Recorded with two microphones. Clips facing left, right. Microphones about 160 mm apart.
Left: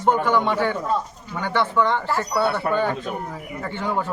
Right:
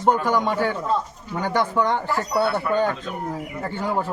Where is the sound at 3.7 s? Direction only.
40° right (ahead or behind).